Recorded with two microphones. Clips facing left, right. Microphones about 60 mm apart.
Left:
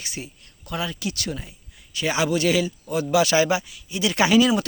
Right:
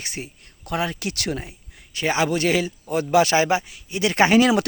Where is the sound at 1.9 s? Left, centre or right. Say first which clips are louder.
Right 1 dB; right.